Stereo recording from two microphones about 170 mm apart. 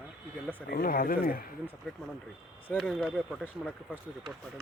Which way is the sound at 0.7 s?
60° left (ahead or behind).